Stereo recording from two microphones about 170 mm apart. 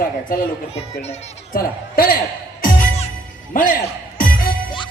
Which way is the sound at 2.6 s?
55° left (ahead or behind).